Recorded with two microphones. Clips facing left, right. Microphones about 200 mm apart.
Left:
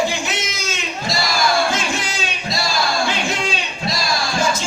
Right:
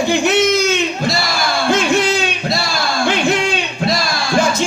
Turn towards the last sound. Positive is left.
turn(degrees=-60)  # may be behind; listen again after turning